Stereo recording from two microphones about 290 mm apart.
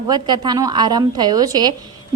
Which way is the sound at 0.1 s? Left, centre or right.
Centre.